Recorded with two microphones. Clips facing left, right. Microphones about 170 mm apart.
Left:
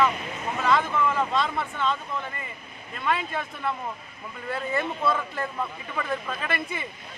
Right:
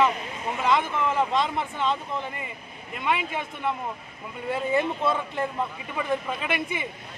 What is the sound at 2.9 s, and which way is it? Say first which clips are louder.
Speech: even; 15° right (ahead or behind).